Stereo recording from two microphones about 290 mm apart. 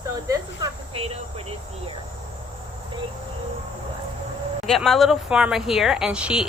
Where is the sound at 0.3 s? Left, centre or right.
Centre.